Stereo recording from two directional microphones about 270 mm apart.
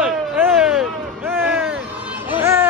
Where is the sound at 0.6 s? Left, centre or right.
Centre.